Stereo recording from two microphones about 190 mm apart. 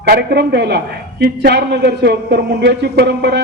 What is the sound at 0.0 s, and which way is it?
A man's voice, 55° right (ahead or behind).